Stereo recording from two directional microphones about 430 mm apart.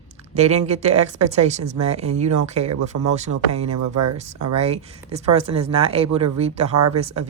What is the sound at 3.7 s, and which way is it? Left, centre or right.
Speech, right.